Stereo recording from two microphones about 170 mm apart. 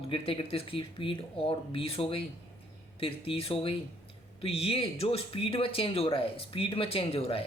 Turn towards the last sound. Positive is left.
turn(degrees=35)  # may be behind; listen again after turning